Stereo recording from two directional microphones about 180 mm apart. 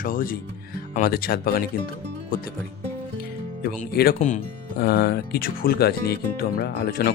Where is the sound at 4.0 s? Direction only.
60° left (ahead or behind).